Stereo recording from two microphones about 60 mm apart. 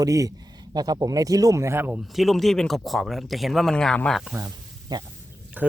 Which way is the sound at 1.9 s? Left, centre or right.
Centre.